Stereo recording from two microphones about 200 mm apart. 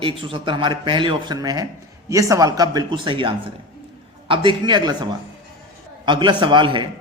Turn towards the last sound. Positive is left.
turn(degrees=-25)  # may be behind; listen again after turning